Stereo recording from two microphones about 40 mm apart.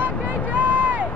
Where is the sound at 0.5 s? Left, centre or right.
Right.